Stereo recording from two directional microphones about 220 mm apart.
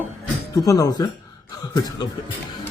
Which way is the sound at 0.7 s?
15° left (ahead or behind).